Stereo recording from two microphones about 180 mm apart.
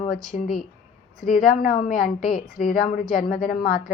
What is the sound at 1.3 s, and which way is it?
A woman's voice, 50° left (ahead or behind).